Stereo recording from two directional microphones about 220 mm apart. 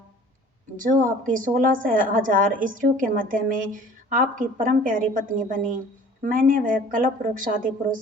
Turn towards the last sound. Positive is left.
turn(degrees=-40)  # may be behind; listen again after turning